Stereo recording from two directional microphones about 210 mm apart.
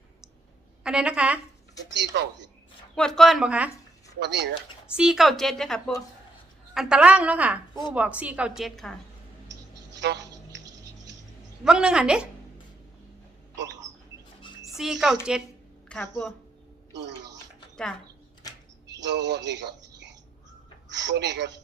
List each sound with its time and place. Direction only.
0.9 s a woman's voice: 5° right (ahead or behind)
1.9 s speech: 55° right (ahead or behind)
2.9 s a woman's voice: 5° left (ahead or behind)
4.2 s speech: 55° right (ahead or behind)
4.9 s a woman's voice: centre (ahead or behind)
10.0 s a sound: 55° right (ahead or behind)
11.6 s a woman's voice: 5° right (ahead or behind)
14.7 s a woman's voice: centre (ahead or behind)
18.9 s speech: 55° right (ahead or behind)